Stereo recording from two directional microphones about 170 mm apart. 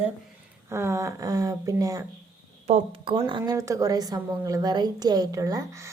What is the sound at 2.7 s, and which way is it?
Speech, 30° right (ahead or behind).